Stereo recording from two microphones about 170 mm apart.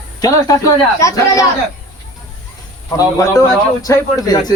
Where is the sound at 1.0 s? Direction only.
20° left (ahead or behind).